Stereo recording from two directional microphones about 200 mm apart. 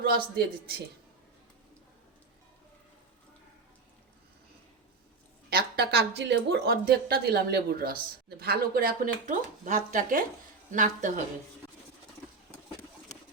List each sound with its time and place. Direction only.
0.0 s speech: 50° right (ahead or behind)
5.5 s speech: 50° right (ahead or behind)